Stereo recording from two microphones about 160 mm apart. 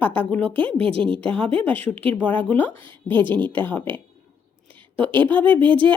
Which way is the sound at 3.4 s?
10° left (ahead or behind).